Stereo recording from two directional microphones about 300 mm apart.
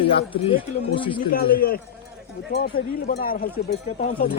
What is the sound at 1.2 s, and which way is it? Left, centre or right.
Speech, left.